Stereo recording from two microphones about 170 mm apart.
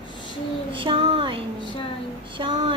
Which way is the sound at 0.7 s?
30° right (ahead or behind).